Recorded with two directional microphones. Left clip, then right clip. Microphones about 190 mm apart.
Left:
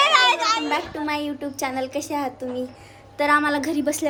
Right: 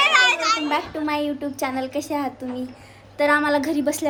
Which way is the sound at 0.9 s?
10° left (ahead or behind).